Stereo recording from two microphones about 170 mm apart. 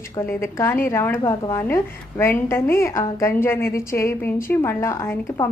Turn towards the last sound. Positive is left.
turn(degrees=15)  # may be behind; listen again after turning